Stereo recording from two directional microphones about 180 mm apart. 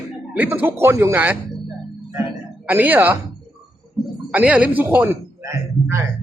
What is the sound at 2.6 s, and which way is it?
Speech, 10° right (ahead or behind).